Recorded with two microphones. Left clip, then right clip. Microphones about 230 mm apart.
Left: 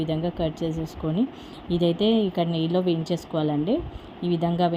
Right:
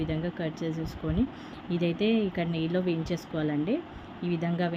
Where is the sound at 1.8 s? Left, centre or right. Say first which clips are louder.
Left 5 dB; centre.